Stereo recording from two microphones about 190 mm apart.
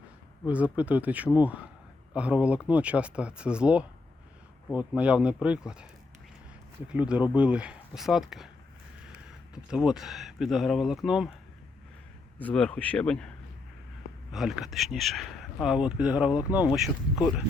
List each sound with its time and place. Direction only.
0.4 s speech: 5° right (ahead or behind)
9.6 s speech: 5° right (ahead or behind)
12.4 s speech: 5° left (ahead or behind)
14.3 s speech: 5° right (ahead or behind)